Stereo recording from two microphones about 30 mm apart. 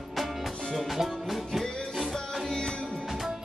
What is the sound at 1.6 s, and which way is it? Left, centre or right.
Music, centre.